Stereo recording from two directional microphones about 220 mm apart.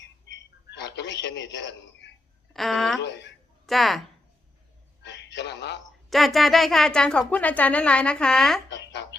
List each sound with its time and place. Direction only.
0.0 s telephone: 55° left (ahead or behind)
2.5 s speech: centre (ahead or behind)
3.0 s speech: 55° left (ahead or behind)
3.7 s speech: centre (ahead or behind)
5.0 s music: 50° left (ahead or behind)
6.1 s speech: centre (ahead or behind)
8.7 s a sound: 50° left (ahead or behind)